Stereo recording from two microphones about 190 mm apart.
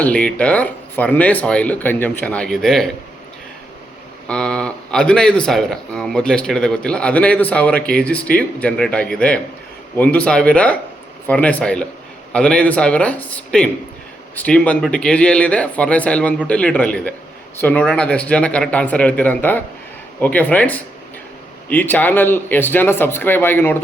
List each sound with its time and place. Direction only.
0.0 s speech: 5° left (ahead or behind)
4.3 s speech: 5° left (ahead or behind)